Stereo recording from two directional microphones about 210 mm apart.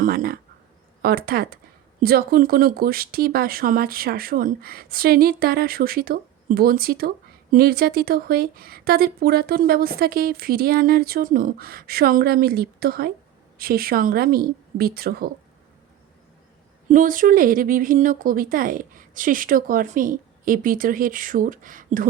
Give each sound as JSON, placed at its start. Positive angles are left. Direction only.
{"t": 0.0, "sound": "speech", "side_deg": -45}
{"t": 16.9, "sound": "speech", "side_deg": -40}